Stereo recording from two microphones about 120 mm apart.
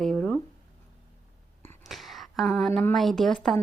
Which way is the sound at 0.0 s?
10° left (ahead or behind).